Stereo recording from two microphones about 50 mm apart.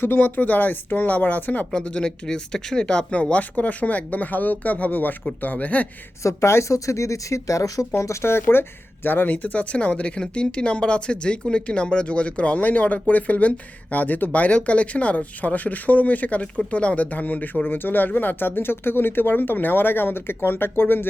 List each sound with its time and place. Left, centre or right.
0.0 s speech: left
1.7 s speech: left
6.2 s speech: left